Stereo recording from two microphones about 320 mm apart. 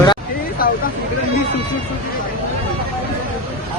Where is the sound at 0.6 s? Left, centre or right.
Left.